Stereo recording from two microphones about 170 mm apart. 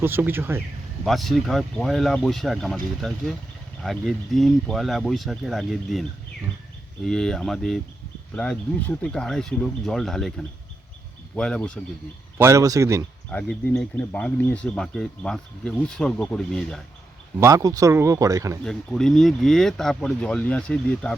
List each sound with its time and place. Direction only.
0.0 s speech: 10° right (ahead or behind)
1.0 s speech: centre (ahead or behind)
12.4 s speech: 15° right (ahead or behind)
13.3 s speech: 5° left (ahead or behind)
17.4 s speech: 20° right (ahead or behind)
18.6 s speech: centre (ahead or behind)